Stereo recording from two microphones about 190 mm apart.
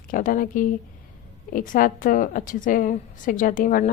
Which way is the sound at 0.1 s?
45° left (ahead or behind).